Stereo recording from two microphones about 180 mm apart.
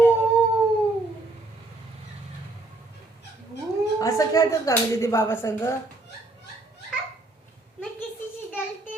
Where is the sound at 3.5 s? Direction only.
70° left (ahead or behind).